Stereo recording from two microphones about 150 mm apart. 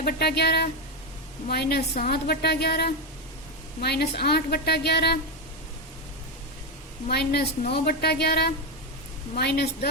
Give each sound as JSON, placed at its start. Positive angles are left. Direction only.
{"t": 0.0, "sound": "a woman's voice", "side_deg": 90}
{"t": 7.1, "sound": "a woman's voice", "side_deg": 90}